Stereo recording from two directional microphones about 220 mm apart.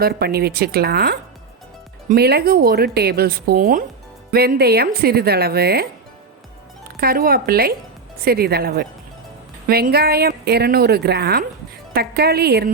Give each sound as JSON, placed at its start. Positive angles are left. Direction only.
{"t": 0.0, "sound": "speech", "side_deg": -45}
{"t": 7.0, "sound": "speech", "side_deg": -40}